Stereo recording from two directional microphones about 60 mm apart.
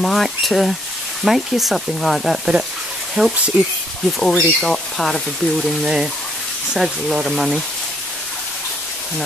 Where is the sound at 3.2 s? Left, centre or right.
Right.